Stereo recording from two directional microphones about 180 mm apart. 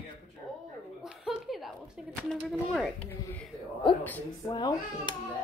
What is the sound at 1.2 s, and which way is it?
Chuckle, centre (ahead or behind).